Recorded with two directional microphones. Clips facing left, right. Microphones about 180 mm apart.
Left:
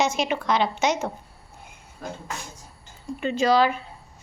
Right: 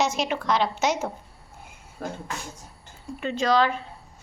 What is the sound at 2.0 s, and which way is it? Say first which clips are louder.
Speech: right 2 dB; 60° right (ahead or behind).